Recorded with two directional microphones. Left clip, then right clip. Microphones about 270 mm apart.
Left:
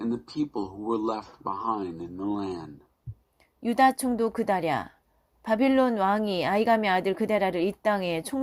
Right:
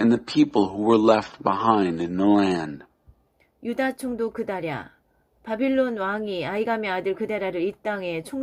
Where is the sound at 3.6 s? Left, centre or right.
Centre.